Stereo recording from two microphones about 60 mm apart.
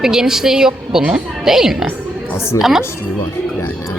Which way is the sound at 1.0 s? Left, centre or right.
Right.